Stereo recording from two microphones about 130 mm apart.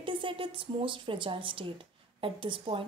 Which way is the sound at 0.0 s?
40° right (ahead or behind).